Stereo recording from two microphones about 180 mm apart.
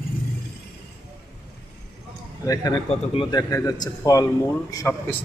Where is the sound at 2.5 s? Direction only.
20° left (ahead or behind).